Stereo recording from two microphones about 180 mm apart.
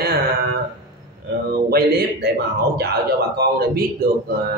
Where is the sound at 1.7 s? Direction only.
60° right (ahead or behind).